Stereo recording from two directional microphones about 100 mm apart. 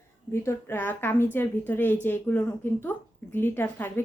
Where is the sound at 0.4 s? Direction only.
20° left (ahead or behind).